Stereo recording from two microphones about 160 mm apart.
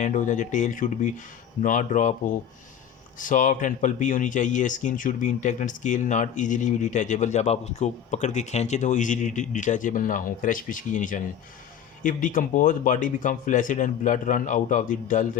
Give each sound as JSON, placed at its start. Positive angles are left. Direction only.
{"t": 0.0, "sound": "a man's voice", "side_deg": 50}